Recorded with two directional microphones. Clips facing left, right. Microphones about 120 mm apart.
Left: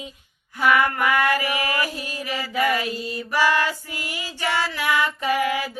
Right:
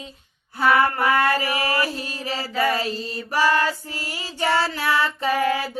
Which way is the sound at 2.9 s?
15° left (ahead or behind).